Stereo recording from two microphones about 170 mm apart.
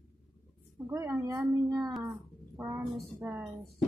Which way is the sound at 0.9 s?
20° right (ahead or behind).